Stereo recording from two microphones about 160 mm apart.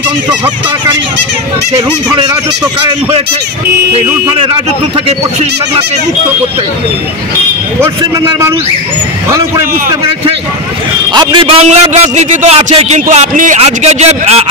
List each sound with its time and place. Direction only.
2.0 s speech: 25° right (ahead or behind)
11.1 s a man's voice: 30° right (ahead or behind)